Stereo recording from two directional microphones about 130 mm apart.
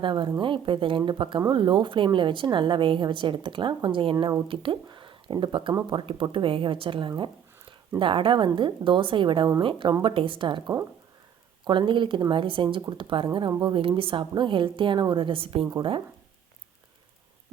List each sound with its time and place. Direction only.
0.0 s a woman's voice: 40° right (ahead or behind)